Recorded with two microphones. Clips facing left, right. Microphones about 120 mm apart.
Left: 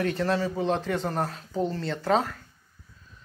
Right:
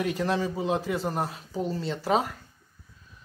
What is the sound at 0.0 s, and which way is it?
Speech, 15° right (ahead or behind).